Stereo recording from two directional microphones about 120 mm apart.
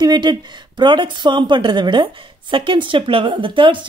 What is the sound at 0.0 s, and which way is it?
Speech, 35° right (ahead or behind).